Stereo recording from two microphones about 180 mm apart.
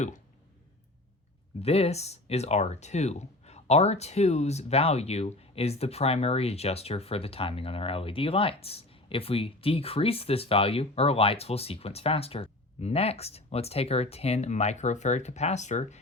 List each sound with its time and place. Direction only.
1.6 s speech: 35° left (ahead or behind)